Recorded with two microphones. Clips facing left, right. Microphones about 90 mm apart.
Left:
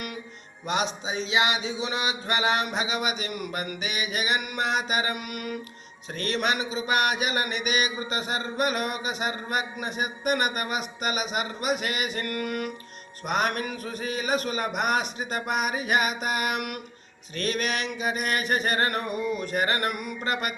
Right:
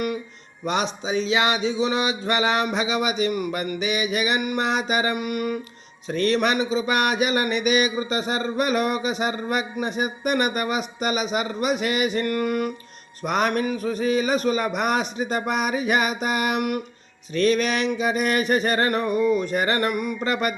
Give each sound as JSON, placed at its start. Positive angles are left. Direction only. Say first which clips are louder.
{"t": 0.6, "sound": "speech", "louder": "right 3 dB", "side_deg": -35}
{"t": 4.2, "sound": "mantra", "louder": "right 4 dB", "side_deg": -30}
{"t": 6.2, "sound": "speech", "louder": "right 6 dB", "side_deg": -35}
{"t": 11.9, "sound": "mantra", "louder": "right 7 dB", "side_deg": -30}
{"t": 13.3, "sound": "speech", "louder": "right 4 dB", "side_deg": -30}